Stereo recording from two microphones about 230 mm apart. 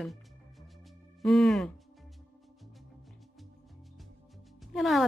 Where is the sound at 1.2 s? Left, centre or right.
Centre.